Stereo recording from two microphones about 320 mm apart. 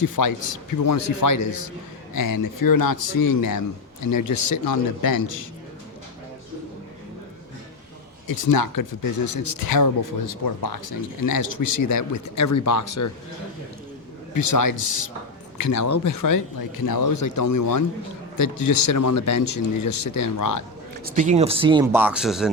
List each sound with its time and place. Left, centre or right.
0.2 s speech: left
2.2 s speech: left
4.0 s speech: left
8.4 s speech: left
14.3 s speech: left
15.7 s speech: left
18.9 s speech: left
21.0 s speech: right; by 22.4 s centre